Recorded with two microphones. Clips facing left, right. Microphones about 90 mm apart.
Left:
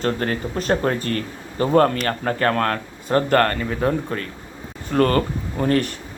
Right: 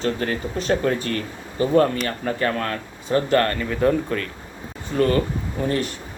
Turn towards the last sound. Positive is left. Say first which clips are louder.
# left 3 dB
turn(degrees=50)  # may be behind; listen again after turning